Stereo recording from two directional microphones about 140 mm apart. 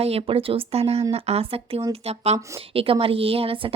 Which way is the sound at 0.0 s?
45° right (ahead or behind).